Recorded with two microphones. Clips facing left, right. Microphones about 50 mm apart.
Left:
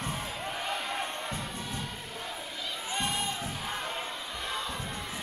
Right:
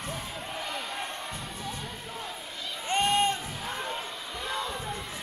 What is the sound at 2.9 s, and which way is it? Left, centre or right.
Crowd, right.